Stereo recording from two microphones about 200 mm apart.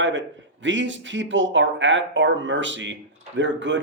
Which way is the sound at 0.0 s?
65° right (ahead or behind).